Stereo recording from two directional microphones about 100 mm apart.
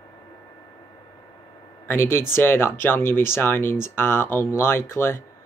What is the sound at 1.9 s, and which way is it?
Speech, 25° left (ahead or behind).